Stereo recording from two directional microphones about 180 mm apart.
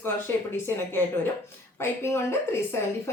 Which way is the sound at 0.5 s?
10° left (ahead or behind).